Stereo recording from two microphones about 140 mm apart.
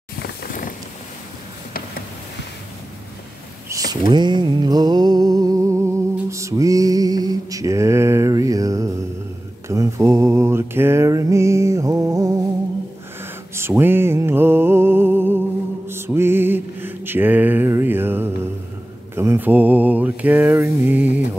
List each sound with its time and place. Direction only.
3.6 s a sound: 25° right (ahead or behind)
4.1 s music: 30° right (ahead or behind)
9.7 s mantra: 20° right (ahead or behind)
15.9 s music: 15° right (ahead or behind)
19.1 s mantra: 15° right (ahead or behind)